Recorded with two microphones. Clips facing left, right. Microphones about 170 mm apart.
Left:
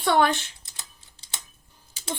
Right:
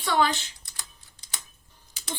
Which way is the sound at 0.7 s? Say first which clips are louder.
Even; 25° left (ahead or behind).